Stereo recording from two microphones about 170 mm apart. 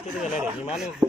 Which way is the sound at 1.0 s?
25° right (ahead or behind).